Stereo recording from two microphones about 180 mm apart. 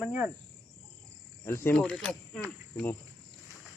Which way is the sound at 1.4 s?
15° left (ahead or behind).